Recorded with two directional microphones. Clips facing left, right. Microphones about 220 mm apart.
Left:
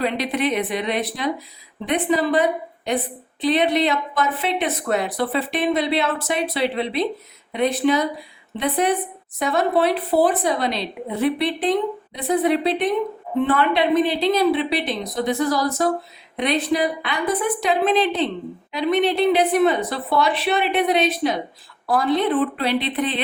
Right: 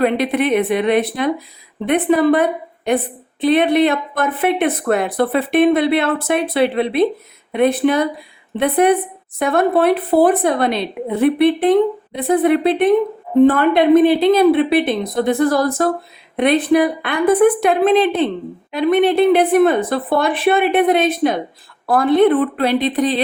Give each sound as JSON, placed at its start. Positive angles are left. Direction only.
{"t": 0.0, "sound": "a woman's voice", "side_deg": -55}